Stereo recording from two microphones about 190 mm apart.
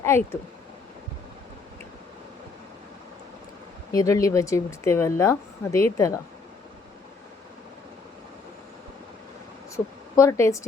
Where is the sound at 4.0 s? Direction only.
15° left (ahead or behind).